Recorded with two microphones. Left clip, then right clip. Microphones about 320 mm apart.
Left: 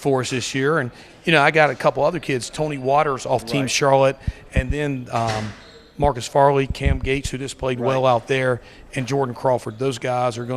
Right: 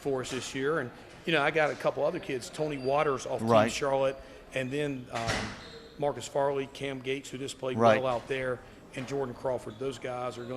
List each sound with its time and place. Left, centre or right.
0.0 s speech: left